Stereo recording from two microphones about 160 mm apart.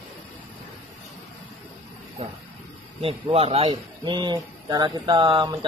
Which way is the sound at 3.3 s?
40° right (ahead or behind).